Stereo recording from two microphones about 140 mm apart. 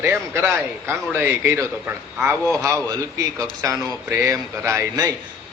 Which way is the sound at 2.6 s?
25° right (ahead or behind).